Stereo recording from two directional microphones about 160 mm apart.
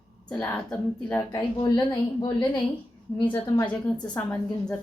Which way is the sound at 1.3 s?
30° left (ahead or behind).